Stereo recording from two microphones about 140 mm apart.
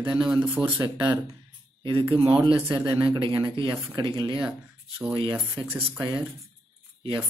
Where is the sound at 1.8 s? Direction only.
40° right (ahead or behind).